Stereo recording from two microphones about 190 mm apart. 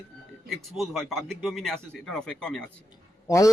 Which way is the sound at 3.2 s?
15° left (ahead or behind).